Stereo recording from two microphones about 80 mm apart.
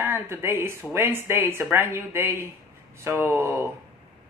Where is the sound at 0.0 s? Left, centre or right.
Right.